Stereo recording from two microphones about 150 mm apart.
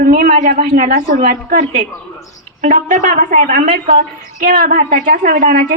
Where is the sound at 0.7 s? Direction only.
60° right (ahead or behind).